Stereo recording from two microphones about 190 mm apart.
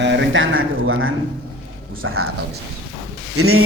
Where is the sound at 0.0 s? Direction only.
65° right (ahead or behind); by 2.2 s 90° right.